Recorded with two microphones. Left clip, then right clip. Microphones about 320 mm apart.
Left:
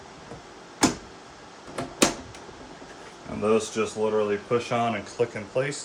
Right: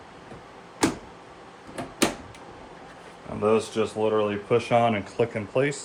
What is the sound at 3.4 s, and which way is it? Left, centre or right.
Speech, centre.